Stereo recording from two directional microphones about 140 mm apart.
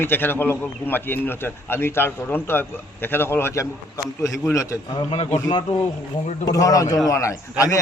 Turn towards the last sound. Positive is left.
turn(degrees=25)  # may be behind; listen again after turning